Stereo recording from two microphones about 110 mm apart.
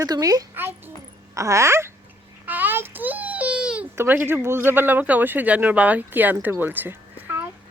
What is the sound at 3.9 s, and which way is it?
Speech, 20° right (ahead or behind).